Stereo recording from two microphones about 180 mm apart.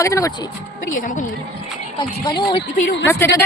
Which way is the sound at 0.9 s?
45° left (ahead or behind).